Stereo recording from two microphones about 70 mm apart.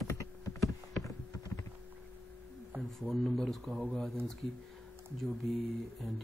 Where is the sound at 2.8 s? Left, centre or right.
Centre.